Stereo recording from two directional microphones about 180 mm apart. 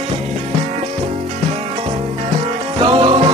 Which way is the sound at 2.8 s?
30° right (ahead or behind).